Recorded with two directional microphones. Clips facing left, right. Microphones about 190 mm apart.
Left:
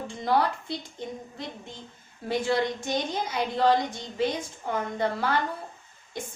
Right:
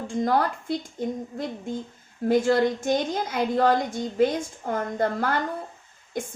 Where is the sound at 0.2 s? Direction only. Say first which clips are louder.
Right 2 dB; 45° right (ahead or behind).